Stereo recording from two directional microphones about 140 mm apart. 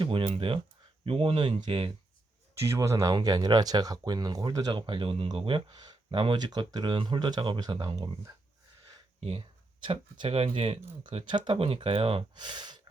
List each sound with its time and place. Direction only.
0.0 s speech: 40° right (ahead or behind)
2.6 s speech: 20° right (ahead or behind)
9.8 s speech: 35° right (ahead or behind)